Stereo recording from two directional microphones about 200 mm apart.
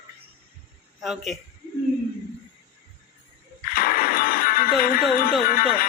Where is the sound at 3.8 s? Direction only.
45° left (ahead or behind).